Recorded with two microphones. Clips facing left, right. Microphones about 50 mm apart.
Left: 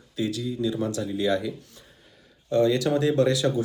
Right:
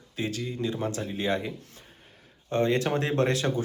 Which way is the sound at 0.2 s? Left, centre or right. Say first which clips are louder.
Left 4 dB; right.